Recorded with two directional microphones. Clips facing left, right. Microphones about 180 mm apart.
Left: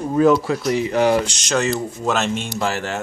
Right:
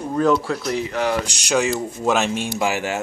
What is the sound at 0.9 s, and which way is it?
Speech, 25° left (ahead or behind).